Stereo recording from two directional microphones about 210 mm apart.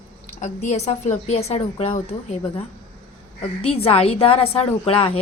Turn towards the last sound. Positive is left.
turn(degrees=25)  # may be behind; listen again after turning